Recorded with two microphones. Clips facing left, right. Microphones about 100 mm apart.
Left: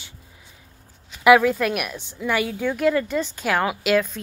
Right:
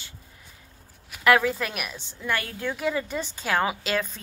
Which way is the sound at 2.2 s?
15° left (ahead or behind).